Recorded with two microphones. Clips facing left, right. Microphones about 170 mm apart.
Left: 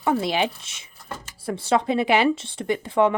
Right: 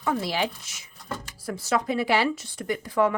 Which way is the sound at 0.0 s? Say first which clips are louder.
Left 4 dB; 25° left (ahead or behind).